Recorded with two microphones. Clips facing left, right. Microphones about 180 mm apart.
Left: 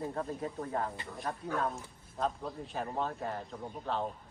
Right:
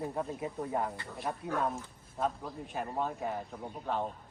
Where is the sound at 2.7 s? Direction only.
10° right (ahead or behind).